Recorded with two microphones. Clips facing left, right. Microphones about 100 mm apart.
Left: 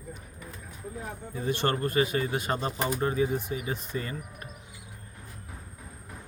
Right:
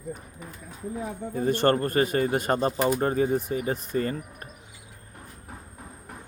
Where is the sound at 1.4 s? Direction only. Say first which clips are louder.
Right 6 dB; 45° right (ahead or behind).